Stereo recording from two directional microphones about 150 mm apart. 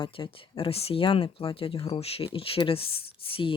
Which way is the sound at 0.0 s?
35° left (ahead or behind).